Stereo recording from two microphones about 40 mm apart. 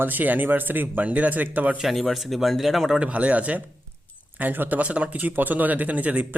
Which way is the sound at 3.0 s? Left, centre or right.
Right.